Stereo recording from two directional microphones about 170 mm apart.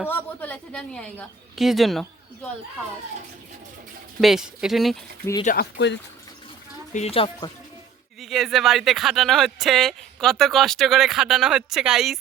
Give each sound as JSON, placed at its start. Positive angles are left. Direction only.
{"t": 0.0, "sound": "a woman's voice", "side_deg": 10}
{"t": 4.2, "sound": "speech", "side_deg": 0}
{"t": 5.2, "sound": "speech", "side_deg": 20}
{"t": 5.5, "sound": "speech", "side_deg": 65}
{"t": 6.9, "sound": "speech", "side_deg": 35}
{"t": 8.2, "sound": "speech", "side_deg": 0}